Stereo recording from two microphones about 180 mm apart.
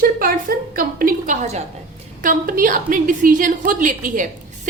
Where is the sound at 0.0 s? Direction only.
50° right (ahead or behind).